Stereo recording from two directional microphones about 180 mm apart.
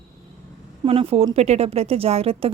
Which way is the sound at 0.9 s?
30° right (ahead or behind).